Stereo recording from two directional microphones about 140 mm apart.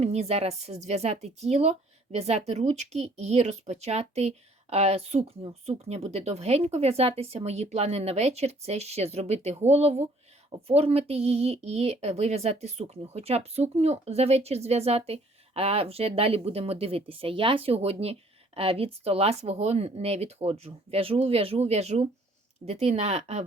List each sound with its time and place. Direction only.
0.0 s speech: 50° right (ahead or behind)